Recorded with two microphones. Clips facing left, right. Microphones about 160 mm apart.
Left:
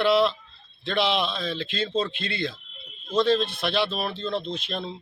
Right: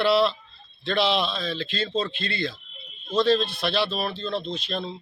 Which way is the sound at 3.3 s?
20° left (ahead or behind).